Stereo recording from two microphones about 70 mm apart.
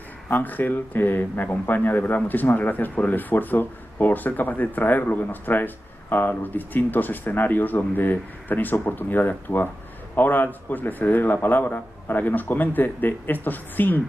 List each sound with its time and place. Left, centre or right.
0.3 s a man's voice: left